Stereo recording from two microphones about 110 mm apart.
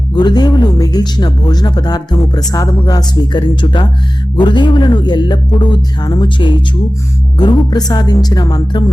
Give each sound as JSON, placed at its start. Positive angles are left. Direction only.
{"t": 0.1, "sound": "speech", "side_deg": 40}